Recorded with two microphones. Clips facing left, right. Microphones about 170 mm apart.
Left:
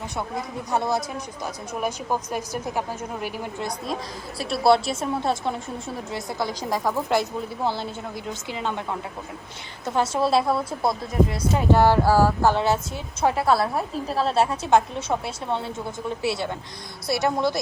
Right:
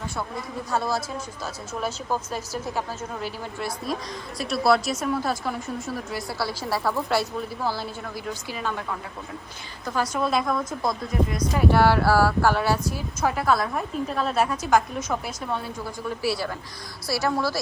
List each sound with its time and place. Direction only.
0.2 s a woman's voice: 20° left (ahead or behind)
4.4 s a woman's voice: centre (ahead or behind)
4.6 s a woman's voice: 30° left (ahead or behind)
11.5 s speech: 20° left (ahead or behind)